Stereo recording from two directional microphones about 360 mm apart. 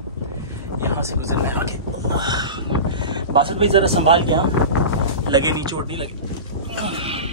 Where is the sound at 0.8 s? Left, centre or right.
Centre.